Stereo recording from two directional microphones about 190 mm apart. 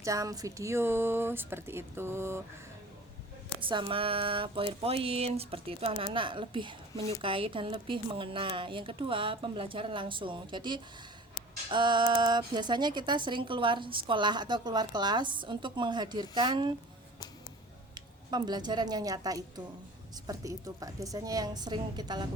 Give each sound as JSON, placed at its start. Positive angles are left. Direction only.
{"t": 0.0, "sound": "speech", "side_deg": -15}
{"t": 3.6, "sound": "a woman's voice", "side_deg": -25}
{"t": 17.9, "sound": "a woman's voice", "side_deg": -20}